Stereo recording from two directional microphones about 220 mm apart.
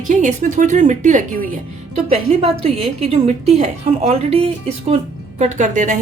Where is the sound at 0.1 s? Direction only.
35° right (ahead or behind).